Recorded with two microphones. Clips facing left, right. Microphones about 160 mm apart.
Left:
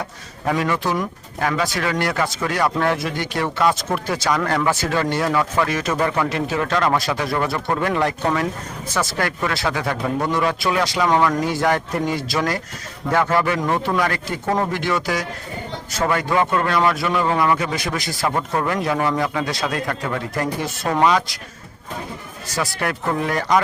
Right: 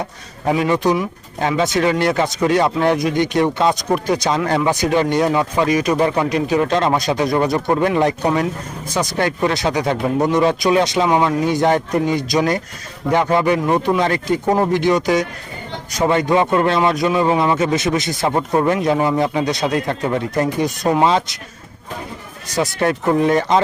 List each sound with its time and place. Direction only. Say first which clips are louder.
0.0 s speech: right 3 dB; 20° right (ahead or behind)
22.5 s speech: right 6 dB; 20° right (ahead or behind)